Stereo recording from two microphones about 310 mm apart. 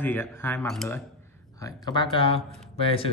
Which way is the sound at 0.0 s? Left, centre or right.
Centre.